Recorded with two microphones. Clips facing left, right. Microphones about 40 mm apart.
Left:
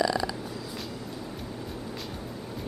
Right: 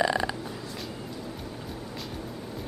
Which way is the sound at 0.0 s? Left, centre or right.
Right.